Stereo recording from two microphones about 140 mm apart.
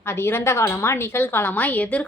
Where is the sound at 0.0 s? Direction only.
20° left (ahead or behind).